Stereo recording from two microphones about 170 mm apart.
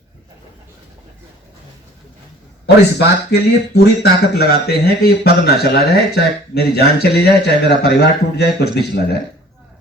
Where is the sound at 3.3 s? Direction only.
70° left (ahead or behind).